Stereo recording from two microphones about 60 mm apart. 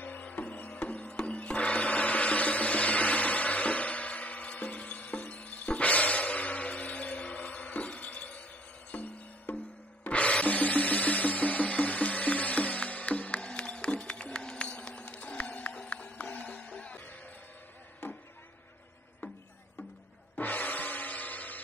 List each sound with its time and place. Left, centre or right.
0.0 s music: left
18.0 s a sound: left
20.3 s music: left